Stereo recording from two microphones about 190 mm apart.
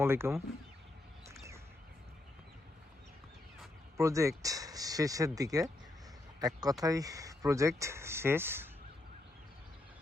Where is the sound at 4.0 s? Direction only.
15° right (ahead or behind).